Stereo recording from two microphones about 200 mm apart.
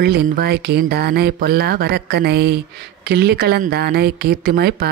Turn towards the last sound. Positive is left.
turn(degrees=-50)  # may be behind; listen again after turning